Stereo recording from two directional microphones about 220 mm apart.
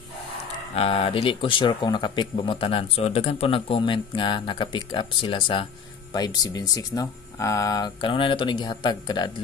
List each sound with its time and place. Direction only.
0.7 s speech: 25° left (ahead or behind)